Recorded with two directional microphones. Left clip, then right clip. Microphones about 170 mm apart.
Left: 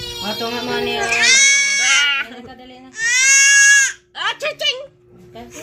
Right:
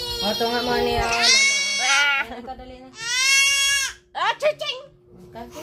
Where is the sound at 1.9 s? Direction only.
30° right (ahead or behind).